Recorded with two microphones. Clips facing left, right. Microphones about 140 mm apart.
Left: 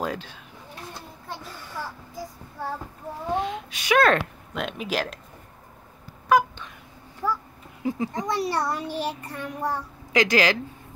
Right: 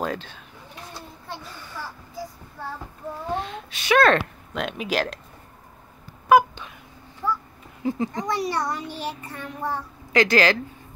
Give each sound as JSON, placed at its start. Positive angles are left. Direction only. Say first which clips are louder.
{"t": 0.0, "sound": "speech", "louder": "right 1 dB", "side_deg": 10}
{"t": 3.3, "sound": "a sound", "louder": "left 3 dB", "side_deg": 10}
{"t": 4.2, "sound": "speech", "louder": "right 1 dB", "side_deg": 0}
{"t": 6.2, "sound": "a sound", "louder": "right 4 dB", "side_deg": -10}
{"t": 7.8, "sound": "speech", "louder": "right 1 dB", "side_deg": 5}
{"t": 8.5, "sound": "a child's voice", "louder": "left 1 dB", "side_deg": 35}
{"t": 10.1, "sound": "speech", "louder": "right 2 dB", "side_deg": 10}